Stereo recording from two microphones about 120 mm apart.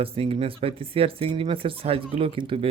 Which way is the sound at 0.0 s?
50° right (ahead or behind).